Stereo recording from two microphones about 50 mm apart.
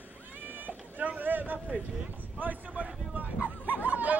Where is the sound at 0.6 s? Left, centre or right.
Right.